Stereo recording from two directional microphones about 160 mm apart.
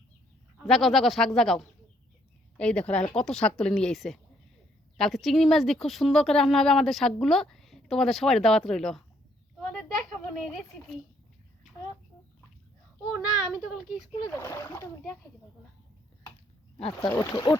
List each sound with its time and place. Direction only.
0.6 s speech: centre (ahead or behind)
9.6 s a sound: 5° left (ahead or behind)
13.5 s speech: 5° right (ahead or behind)
14.2 s speech: 20° left (ahead or behind)
16.7 s speech: 30° left (ahead or behind)